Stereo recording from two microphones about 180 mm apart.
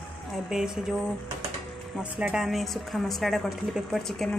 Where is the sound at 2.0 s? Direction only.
5° right (ahead or behind).